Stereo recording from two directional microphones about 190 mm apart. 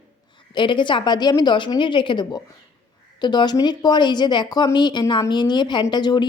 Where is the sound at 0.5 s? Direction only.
25° left (ahead or behind).